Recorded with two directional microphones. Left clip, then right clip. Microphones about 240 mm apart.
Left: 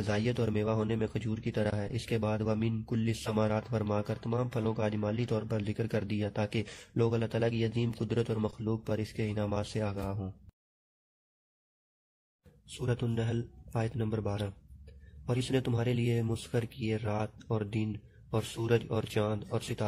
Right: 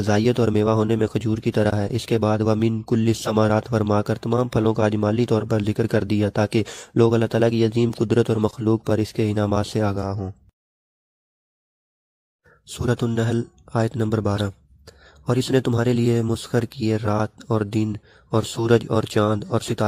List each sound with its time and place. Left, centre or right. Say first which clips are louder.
0.0 s speech: right 13 dB; right
12.8 s speech: right 12 dB; right